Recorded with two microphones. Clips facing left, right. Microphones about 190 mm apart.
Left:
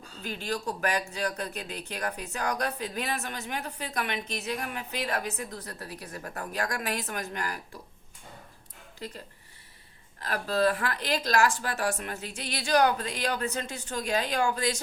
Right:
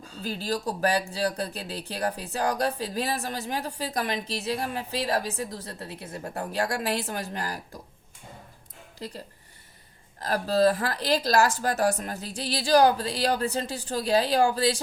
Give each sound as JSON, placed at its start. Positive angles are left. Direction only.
{"t": 0.2, "sound": "speech", "side_deg": -35}
{"t": 10.2, "sound": "speech", "side_deg": -40}